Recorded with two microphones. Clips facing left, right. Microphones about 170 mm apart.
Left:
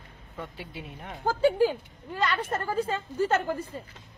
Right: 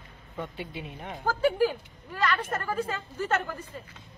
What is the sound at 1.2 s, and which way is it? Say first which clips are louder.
Speech: left 2 dB; 25° left (ahead or behind).